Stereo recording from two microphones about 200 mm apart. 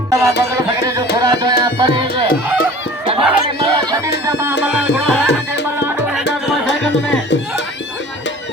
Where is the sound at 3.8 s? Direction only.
20° right (ahead or behind); by 6.7 s 5° right (ahead or behind).